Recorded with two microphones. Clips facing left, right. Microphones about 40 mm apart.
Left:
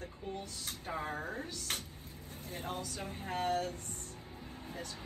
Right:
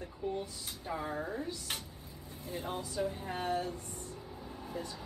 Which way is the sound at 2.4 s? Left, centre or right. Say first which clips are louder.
Right 2 dB; left.